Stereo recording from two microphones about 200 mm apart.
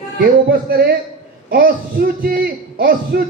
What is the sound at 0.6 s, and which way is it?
A man's voice, 50° right (ahead or behind).